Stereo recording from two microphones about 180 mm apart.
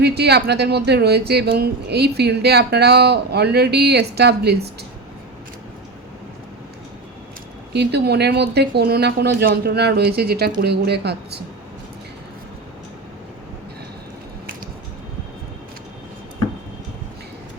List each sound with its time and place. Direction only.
0.0 s speech: 65° right (ahead or behind)
7.7 s speech: 70° right (ahead or behind)